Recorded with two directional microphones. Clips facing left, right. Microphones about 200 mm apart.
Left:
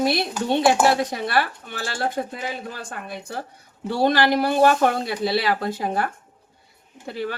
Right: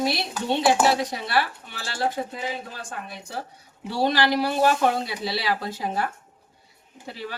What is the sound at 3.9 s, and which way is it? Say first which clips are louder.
Speech: left 3 dB; 55° left (ahead or behind).